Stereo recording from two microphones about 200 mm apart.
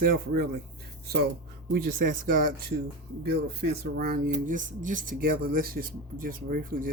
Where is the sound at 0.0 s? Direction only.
45° right (ahead or behind).